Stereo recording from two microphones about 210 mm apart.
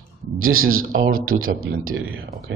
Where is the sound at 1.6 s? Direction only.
80° right.